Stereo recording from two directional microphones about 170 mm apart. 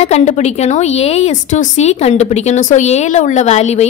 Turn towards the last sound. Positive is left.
turn(degrees=40)  # may be behind; listen again after turning